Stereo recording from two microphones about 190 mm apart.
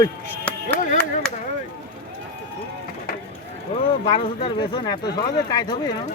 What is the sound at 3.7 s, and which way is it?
Speech, 30° left (ahead or behind).